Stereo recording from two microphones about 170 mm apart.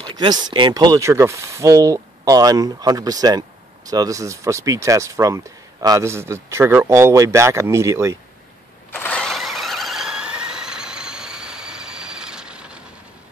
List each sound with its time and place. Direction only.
0.0 s speech: 25° right (ahead or behind)
8.9 s squeal: 10° left (ahead or behind)